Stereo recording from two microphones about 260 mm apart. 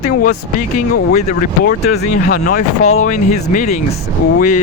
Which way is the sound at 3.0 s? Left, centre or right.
Left.